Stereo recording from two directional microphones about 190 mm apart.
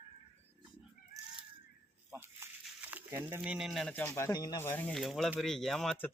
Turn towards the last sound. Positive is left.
turn(degrees=5)  # may be behind; listen again after turning